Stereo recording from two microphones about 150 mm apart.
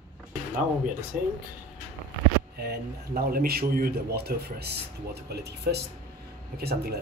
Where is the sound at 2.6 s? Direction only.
90° right.